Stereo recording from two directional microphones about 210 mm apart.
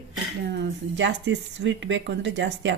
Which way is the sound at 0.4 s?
55° right (ahead or behind).